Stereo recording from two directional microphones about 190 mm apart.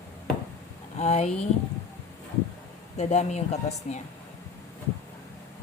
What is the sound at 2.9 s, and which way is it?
Speech, 35° left (ahead or behind).